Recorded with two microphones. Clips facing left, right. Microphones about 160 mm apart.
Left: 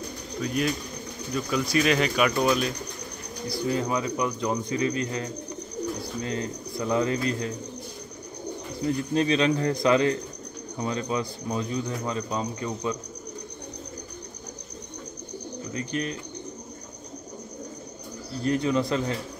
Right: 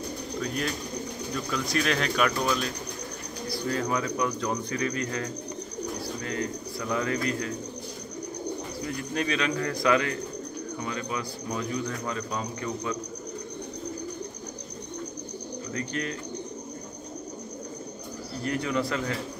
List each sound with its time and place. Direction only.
0.4 s speech: 5° left (ahead or behind); by 7.5 s 25° left (ahead or behind)
9.1 s speech: 30° left (ahead or behind)
15.7 s speech: 20° left (ahead or behind)
18.4 s speech: 25° left (ahead or behind)